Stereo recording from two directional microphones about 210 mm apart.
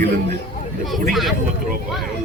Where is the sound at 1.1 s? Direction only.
Centre (ahead or behind).